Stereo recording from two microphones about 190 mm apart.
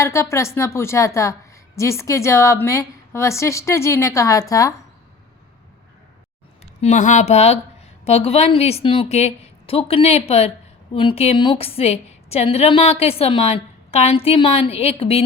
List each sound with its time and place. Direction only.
0.0 s a woman's voice: 15° left (ahead or behind)
6.8 s a woman's voice: 40° left (ahead or behind)